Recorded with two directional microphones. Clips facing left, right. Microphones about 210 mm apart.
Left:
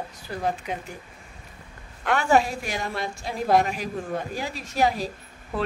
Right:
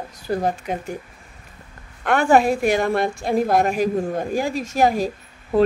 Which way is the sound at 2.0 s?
50° right (ahead or behind).